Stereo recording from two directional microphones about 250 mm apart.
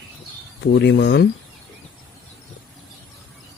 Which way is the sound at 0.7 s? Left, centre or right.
Left.